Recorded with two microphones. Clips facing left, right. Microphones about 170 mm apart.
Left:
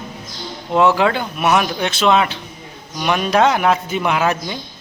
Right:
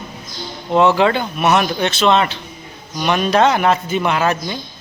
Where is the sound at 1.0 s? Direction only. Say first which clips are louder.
Right 2 dB; 5° left (ahead or behind).